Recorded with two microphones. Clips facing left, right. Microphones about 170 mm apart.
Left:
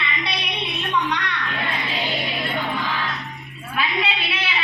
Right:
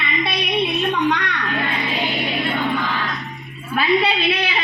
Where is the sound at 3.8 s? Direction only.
40° right (ahead or behind).